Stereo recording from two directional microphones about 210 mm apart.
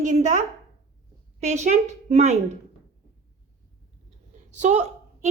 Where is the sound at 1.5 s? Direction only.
35° right (ahead or behind).